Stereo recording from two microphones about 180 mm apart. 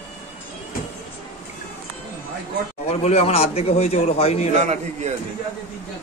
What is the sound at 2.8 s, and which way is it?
A man's voice, 35° left (ahead or behind).